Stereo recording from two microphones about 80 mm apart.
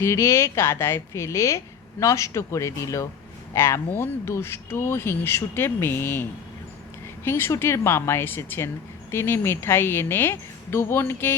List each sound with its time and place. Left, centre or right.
0.0 s speech: left
7.3 s speech: left